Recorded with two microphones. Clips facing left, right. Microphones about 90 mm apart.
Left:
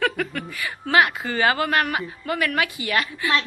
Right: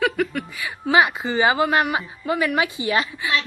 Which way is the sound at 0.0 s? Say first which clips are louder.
Right 3 dB; 5° right (ahead or behind).